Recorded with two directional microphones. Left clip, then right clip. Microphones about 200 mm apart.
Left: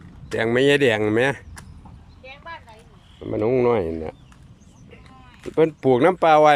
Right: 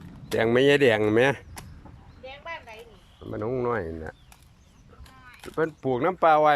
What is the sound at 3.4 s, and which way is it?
Speech, 20° left (ahead or behind).